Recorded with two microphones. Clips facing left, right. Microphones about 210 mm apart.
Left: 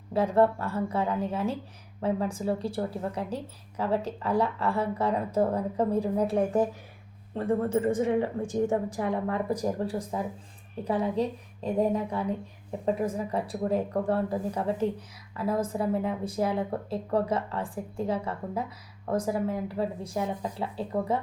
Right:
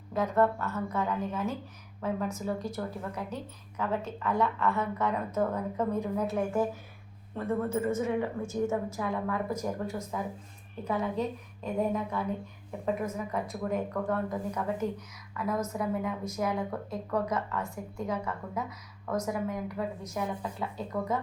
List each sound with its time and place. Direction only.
0.1 s speech: 30° left (ahead or behind)